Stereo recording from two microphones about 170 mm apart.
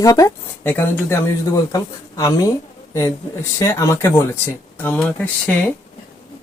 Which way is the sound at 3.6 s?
15° left (ahead or behind).